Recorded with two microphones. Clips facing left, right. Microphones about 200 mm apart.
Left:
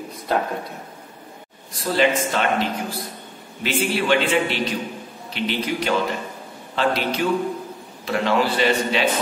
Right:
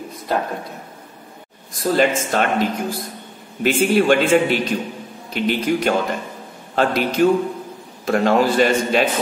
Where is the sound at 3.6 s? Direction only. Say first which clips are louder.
Right 6 dB; 45° right (ahead or behind).